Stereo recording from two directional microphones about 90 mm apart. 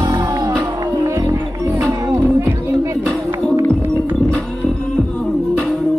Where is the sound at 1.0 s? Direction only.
35° right (ahead or behind).